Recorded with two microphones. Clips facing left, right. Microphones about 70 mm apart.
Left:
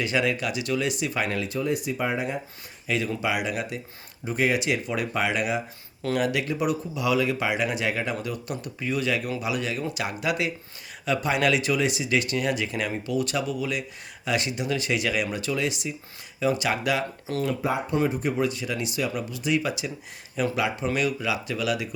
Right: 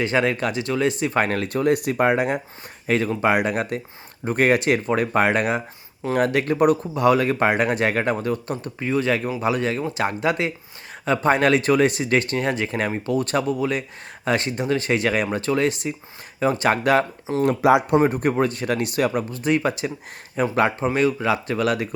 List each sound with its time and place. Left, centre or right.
0.0 s speech: right
2.8 s speech: right
17.6 s speech: right
17.9 s speech: right